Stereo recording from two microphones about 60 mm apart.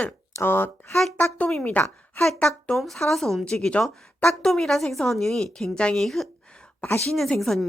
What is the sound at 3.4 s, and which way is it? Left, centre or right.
A woman's voice, centre.